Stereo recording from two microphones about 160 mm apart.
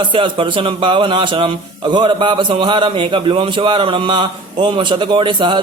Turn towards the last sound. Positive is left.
turn(degrees=-30)  # may be behind; listen again after turning